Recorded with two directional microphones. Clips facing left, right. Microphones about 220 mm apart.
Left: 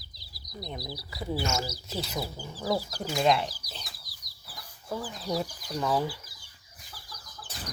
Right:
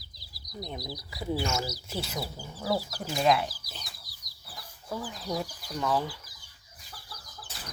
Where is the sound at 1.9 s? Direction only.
10° right (ahead or behind).